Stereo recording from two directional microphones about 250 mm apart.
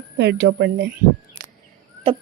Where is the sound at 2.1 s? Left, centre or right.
Right.